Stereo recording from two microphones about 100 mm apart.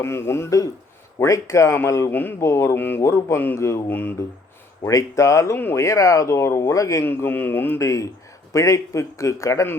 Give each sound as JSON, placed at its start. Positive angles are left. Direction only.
{"t": 0.0, "sound": "speech", "side_deg": 25}
{"t": 4.8, "sound": "speech", "side_deg": 35}
{"t": 7.1, "sound": "speech", "side_deg": 20}
{"t": 7.8, "sound": "speech", "side_deg": 35}